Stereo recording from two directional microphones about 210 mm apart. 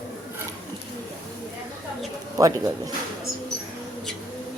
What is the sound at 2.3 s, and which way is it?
Speech, 15° right (ahead or behind).